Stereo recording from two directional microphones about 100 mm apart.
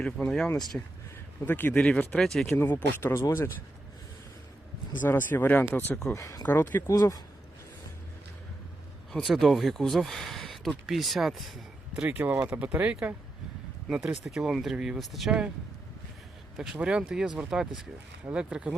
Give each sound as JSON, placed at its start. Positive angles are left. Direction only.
{"t": 0.0, "sound": "speech", "side_deg": 5}
{"t": 1.5, "sound": "speech", "side_deg": 20}
{"t": 2.6, "sound": "speech", "side_deg": 20}
{"t": 4.9, "sound": "speech", "side_deg": 20}
{"t": 6.1, "sound": "speech", "side_deg": 35}
{"t": 6.5, "sound": "speech", "side_deg": 20}
{"t": 6.8, "sound": "speech", "side_deg": 35}
{"t": 9.1, "sound": "speech", "side_deg": 0}
{"t": 11.9, "sound": "speech", "side_deg": -20}
{"t": 16.6, "sound": "speech", "side_deg": -5}